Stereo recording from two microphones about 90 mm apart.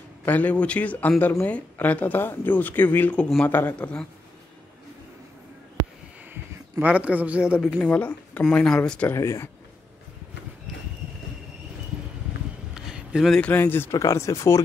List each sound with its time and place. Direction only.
0.2 s a man's voice: 20° left (ahead or behind)
6.8 s a man's voice: 15° right (ahead or behind)
7.6 s a man's voice: 10° left (ahead or behind)
9.1 s speech: 30° left (ahead or behind)
12.7 s a sound: 10° right (ahead or behind)
13.5 s speech: 25° left (ahead or behind)
13.9 s speech: 35° left (ahead or behind)